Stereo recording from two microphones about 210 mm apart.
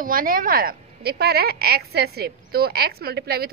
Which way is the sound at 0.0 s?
40° right (ahead or behind).